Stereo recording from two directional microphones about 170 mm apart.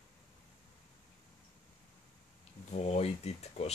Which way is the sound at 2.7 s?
40° left (ahead or behind).